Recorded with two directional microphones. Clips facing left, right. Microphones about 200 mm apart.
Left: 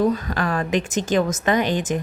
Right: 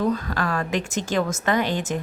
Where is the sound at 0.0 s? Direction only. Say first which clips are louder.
Left 3 dB; 15° left (ahead or behind).